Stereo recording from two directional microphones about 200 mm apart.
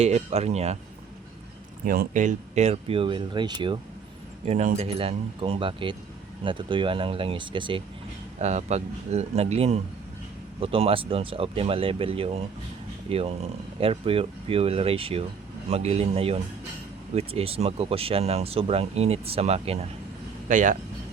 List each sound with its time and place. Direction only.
0.0 s speech: 30° right (ahead or behind)
1.8 s speech: 45° right (ahead or behind); by 3.8 s 25° right (ahead or behind)
4.4 s speech: 35° right (ahead or behind)
8.4 s speech: 35° right (ahead or behind)